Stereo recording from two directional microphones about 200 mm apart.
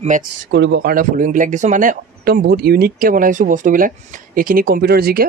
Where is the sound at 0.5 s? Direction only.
60° right (ahead or behind).